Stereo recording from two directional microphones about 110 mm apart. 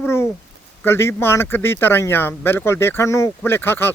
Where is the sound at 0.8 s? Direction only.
20° left (ahead or behind).